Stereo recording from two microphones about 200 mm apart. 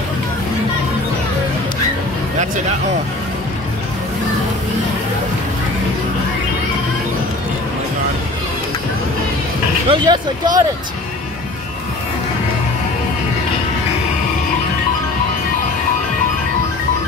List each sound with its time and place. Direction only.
9.8 s speech: 20° right (ahead or behind)